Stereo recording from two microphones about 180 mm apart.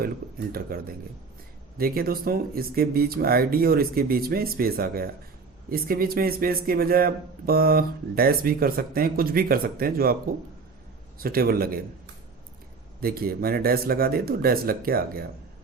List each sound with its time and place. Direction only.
0.0 s speech: 55° right (ahead or behind)
1.8 s speech: 55° right (ahead or behind)
11.2 s speech: 55° right (ahead or behind)
13.0 s speech: 55° right (ahead or behind)